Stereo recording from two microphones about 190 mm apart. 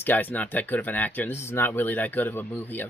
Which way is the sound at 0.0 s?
10° left (ahead or behind).